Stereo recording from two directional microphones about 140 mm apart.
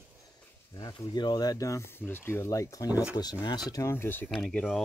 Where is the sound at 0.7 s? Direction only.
30° left (ahead or behind); by 4.3 s 15° left (ahead or behind).